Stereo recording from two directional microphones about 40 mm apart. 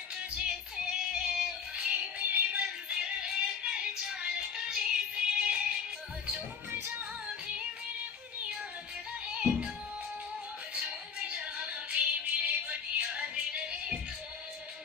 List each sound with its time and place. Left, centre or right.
0.1 s music: right
1.8 s music: right
2.4 s music: right
2.9 s music: right
7.2 s music: right
9.3 s music: right
10.7 s music: right